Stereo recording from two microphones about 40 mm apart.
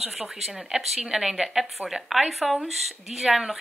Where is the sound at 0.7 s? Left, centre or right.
Right.